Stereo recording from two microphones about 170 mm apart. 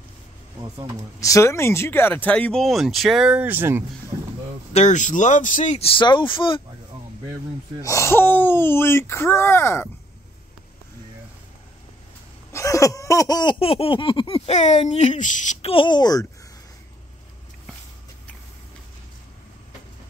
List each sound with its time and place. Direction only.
1.2 s speech: 20° left (ahead or behind); by 3.8 s 15° right (ahead or behind)
4.7 s speech: 45° left (ahead or behind); by 6.6 s 30° left (ahead or behind)
7.8 s speech: 15° left (ahead or behind)
12.5 s laughter: 20° left (ahead or behind); by 15.7 s 45° left (ahead or behind)
15.7 s speech: 30° left (ahead or behind)